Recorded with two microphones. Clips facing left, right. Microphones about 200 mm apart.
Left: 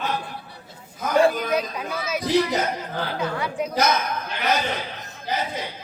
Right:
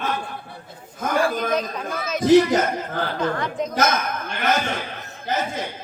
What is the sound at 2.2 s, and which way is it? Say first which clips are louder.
Speech: right 7 dB; 50° right (ahead or behind).